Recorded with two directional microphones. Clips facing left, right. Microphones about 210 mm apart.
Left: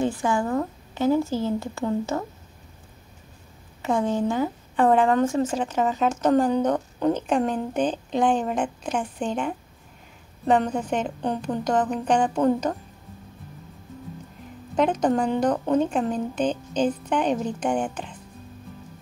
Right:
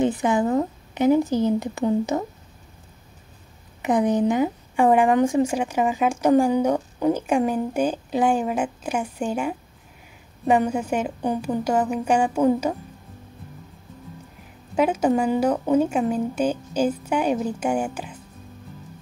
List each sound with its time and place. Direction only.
0.0 s speech: 20° right (ahead or behind)
3.8 s speech: 15° right (ahead or behind)
14.8 s speech: 10° right (ahead or behind)